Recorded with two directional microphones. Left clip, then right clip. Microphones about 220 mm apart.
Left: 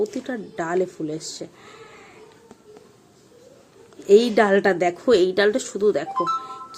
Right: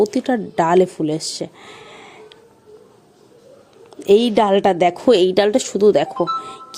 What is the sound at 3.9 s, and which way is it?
A woman's voice, 30° right (ahead or behind).